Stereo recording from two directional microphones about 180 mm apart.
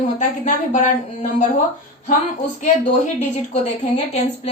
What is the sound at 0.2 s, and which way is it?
Speech, 45° left (ahead or behind).